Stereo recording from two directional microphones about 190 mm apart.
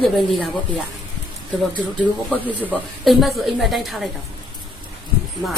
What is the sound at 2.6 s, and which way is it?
A woman's voice, 5° right (ahead or behind).